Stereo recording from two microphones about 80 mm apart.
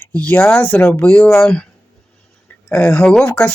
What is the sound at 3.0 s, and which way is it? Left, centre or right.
Speech, centre.